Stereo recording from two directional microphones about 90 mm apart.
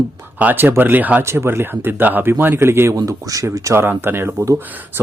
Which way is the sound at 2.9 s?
40° right (ahead or behind).